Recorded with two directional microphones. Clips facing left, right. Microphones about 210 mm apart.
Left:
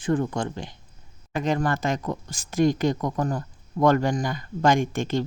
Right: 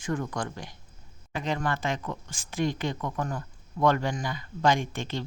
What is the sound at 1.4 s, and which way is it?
Speech, 45° left (ahead or behind).